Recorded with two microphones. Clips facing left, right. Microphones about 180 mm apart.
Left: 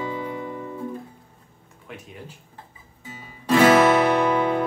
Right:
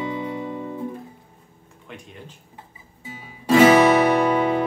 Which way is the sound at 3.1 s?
10° right (ahead or behind).